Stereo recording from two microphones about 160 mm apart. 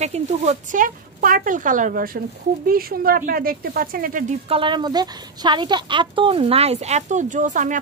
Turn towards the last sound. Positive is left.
turn(degrees=-50)  # may be behind; listen again after turning